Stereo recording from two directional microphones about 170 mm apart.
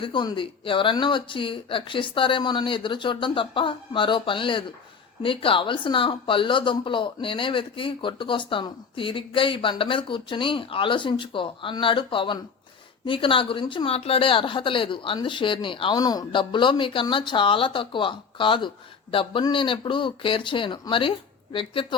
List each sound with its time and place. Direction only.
0.0 s speech: 25° left (ahead or behind)